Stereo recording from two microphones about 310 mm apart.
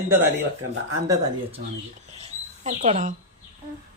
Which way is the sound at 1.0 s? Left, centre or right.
Centre.